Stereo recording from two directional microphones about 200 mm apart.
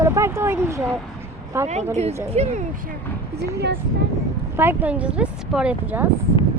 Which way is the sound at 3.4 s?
55° right (ahead or behind).